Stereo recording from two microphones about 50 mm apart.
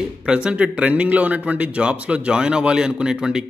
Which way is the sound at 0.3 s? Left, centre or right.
Centre.